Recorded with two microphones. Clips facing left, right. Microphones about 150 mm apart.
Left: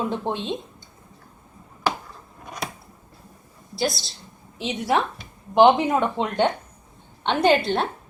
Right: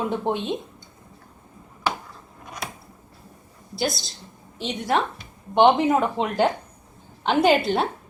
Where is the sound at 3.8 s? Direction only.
Centre (ahead or behind).